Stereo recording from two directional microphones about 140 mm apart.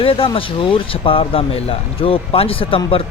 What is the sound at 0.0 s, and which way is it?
Speech, 40° left (ahead or behind).